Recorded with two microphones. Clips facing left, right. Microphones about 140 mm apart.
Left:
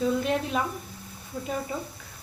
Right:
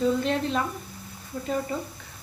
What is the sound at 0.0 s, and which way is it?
Speech, 10° left (ahead or behind).